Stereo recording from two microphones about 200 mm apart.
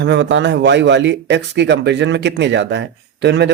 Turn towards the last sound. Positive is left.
turn(degrees=-60)  # may be behind; listen again after turning